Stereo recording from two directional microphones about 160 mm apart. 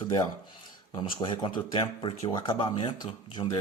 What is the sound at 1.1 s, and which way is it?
Speech, 35° left (ahead or behind).